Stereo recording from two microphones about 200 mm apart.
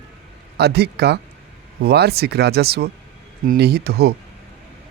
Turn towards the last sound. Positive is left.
turn(degrees=-50)  # may be behind; listen again after turning